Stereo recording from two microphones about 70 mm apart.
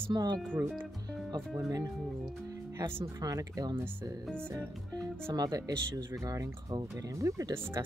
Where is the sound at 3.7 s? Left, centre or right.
Right.